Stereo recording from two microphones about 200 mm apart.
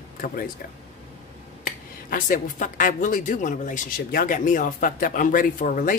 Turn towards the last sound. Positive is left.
turn(degrees=40)  # may be behind; listen again after turning